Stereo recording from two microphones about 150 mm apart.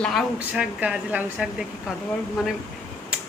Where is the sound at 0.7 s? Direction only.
10° right (ahead or behind).